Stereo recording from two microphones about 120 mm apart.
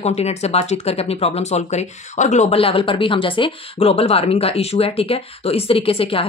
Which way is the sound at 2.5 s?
50° left (ahead or behind).